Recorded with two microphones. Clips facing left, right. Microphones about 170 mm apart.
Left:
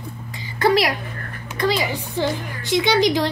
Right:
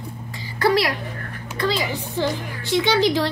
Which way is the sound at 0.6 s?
20° left (ahead or behind).